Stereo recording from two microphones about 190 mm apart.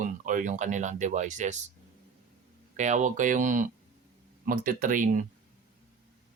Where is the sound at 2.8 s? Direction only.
40° right (ahead or behind).